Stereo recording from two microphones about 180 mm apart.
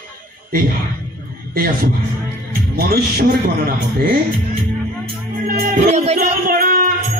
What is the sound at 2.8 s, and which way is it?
Speech, 60° right (ahead or behind).